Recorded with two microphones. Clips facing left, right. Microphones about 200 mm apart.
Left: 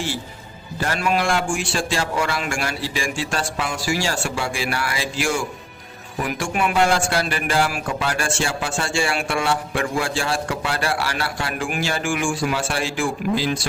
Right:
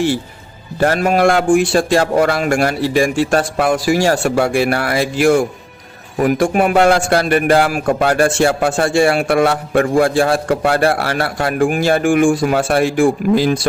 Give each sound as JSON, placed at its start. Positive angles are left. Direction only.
{"t": 0.8, "sound": "a man's voice", "side_deg": -50}